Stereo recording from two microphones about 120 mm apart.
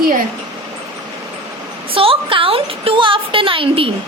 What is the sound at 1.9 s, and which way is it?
A woman's voice, 50° right (ahead or behind).